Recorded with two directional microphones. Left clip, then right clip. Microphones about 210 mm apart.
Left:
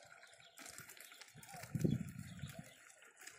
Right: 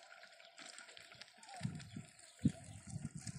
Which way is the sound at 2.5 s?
40° left (ahead or behind).